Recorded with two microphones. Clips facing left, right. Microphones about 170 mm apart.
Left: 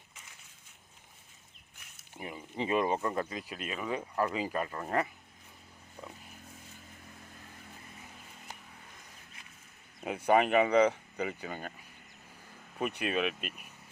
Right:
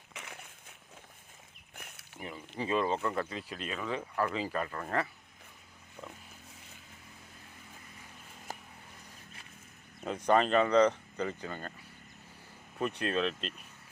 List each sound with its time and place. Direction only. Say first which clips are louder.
0.1 s crushing: right 13 dB; 70° right (ahead or behind)
1.7 s a sound: right 11 dB; 55° right (ahead or behind)
2.1 s speech: left 2 dB; 15° left (ahead or behind)
10.0 s speech: left 1 dB; 10° left (ahead or behind)
12.8 s speech: even; 10° left (ahead or behind)